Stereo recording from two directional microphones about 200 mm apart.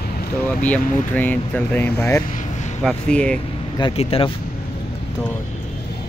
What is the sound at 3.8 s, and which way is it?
Speech, 25° left (ahead or behind).